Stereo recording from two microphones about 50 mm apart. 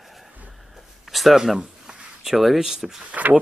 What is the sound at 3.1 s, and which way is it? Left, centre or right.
Speech, right.